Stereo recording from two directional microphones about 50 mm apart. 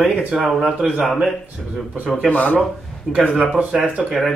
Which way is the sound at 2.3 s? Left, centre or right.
Left.